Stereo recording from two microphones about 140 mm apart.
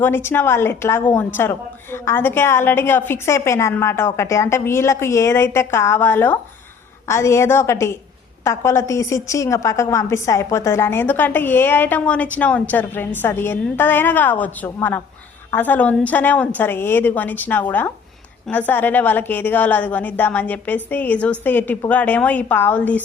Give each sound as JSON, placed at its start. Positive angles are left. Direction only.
{"t": 0.0, "sound": "a woman's voice", "side_deg": 15}